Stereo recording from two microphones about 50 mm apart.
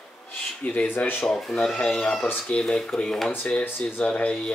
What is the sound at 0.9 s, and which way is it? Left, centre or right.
Speech, left.